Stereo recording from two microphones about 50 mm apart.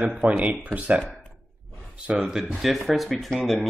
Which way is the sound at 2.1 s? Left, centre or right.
Centre.